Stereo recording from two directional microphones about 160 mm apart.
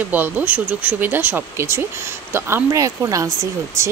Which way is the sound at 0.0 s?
10° right (ahead or behind).